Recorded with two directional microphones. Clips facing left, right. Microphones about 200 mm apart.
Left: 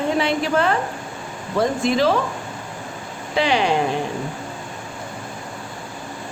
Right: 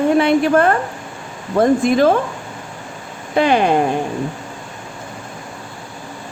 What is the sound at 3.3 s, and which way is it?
Speech, 50° right (ahead or behind).